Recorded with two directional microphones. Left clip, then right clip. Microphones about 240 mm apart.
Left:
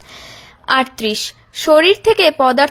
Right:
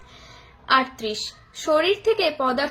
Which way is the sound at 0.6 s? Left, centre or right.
Left.